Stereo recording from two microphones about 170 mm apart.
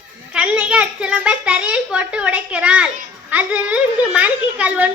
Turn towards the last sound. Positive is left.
turn(degrees=-10)  # may be behind; listen again after turning